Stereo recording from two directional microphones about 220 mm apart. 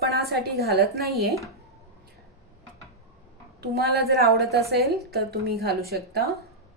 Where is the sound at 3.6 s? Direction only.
45° right (ahead or behind).